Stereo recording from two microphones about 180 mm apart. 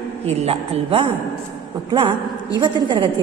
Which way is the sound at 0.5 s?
30° right (ahead or behind).